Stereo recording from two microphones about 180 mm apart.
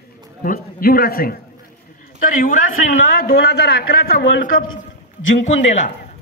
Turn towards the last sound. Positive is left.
turn(degrees=40)  # may be behind; listen again after turning